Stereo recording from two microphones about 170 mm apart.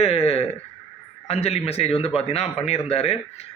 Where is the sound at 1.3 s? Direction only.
35° left (ahead or behind).